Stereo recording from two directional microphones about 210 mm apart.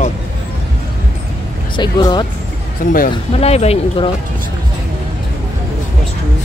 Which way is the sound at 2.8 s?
40° left (ahead or behind).